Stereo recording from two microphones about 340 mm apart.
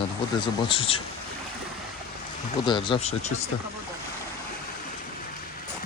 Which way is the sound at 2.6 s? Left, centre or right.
Centre.